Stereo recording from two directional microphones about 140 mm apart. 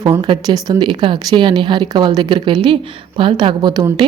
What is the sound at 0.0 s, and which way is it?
Speech, 30° right (ahead or behind).